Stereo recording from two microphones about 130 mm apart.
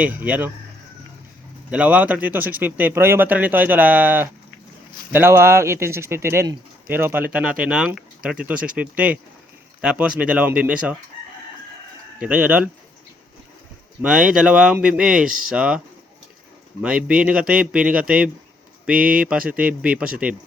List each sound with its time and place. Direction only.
0.0 s speech: 10° right (ahead or behind)
1.7 s speech: 10° right (ahead or behind)
12.2 s speech: 10° right (ahead or behind)
14.0 s speech: 5° right (ahead or behind)
15.3 s speech: 90° right
15.5 s speech: 10° right (ahead or behind)
16.8 s speech: 10° right (ahead or behind)